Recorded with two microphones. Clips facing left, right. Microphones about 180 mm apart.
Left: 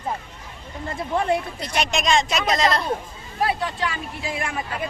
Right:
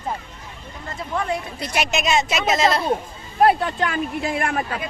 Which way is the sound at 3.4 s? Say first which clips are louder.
Right 7 dB; 55° right (ahead or behind).